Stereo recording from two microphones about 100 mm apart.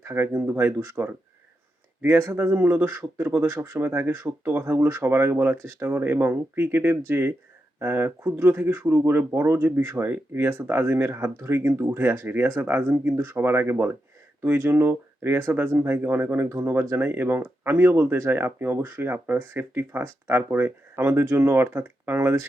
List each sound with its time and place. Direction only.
0.0 s speech: 20° right (ahead or behind)